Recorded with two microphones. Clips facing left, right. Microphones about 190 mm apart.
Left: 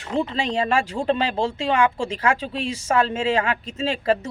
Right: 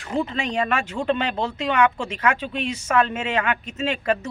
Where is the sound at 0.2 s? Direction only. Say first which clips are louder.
Left 1 dB; 30° left (ahead or behind).